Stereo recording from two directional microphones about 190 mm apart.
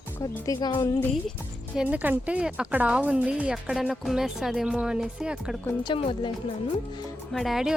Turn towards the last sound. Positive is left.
turn(degrees=0)  # may be behind; listen again after turning